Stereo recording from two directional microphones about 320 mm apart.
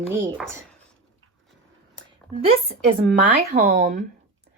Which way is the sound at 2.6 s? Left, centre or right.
Right.